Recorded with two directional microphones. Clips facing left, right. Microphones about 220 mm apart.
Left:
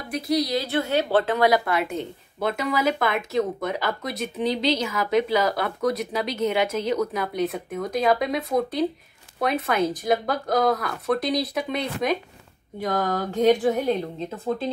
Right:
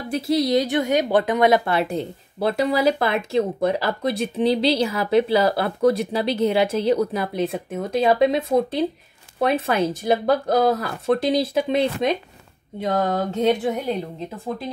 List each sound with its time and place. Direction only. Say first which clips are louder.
0.1 s a woman's voice: right 4 dB; 25° right (ahead or behind)